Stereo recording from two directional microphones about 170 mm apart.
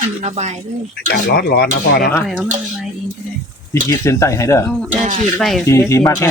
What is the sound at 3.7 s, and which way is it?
Speech, 15° left (ahead or behind).